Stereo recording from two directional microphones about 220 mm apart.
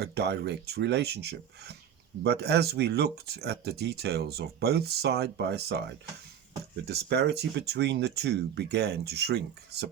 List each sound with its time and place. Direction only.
0.0 s speech: 50° right (ahead or behind)
6.8 s speech: 50° right (ahead or behind)